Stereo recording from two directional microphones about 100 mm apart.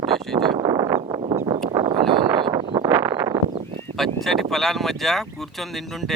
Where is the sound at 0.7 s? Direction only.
35° right (ahead or behind).